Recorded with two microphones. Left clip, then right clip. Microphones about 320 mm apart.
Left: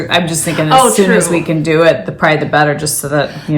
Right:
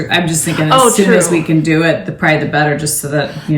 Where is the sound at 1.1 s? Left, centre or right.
Centre.